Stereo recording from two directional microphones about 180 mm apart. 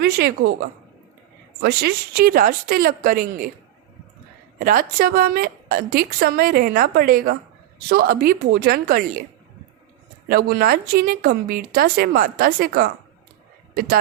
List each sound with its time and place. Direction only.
0.0 s a woman's voice: 60° right (ahead or behind)
1.6 s a woman's voice: 60° right (ahead or behind)
4.6 s a woman's voice: 50° right (ahead or behind)
10.2 s a woman's voice: 55° right (ahead or behind)